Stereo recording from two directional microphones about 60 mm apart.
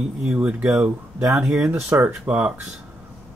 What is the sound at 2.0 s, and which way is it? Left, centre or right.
Speech, right.